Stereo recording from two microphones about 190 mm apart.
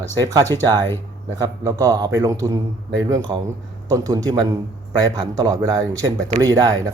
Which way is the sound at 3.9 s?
20° right (ahead or behind).